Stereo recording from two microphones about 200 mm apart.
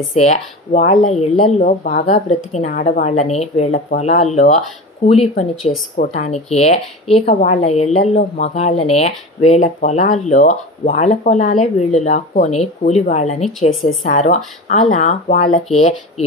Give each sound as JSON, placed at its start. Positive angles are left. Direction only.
{"t": 0.2, "sound": "speech", "side_deg": 35}
{"t": 13.5, "sound": "a woman's voice", "side_deg": 0}
{"t": 13.8, "sound": "speech", "side_deg": 40}